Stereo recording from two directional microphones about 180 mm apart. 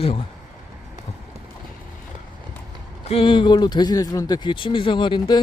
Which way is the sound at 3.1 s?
30° left (ahead or behind).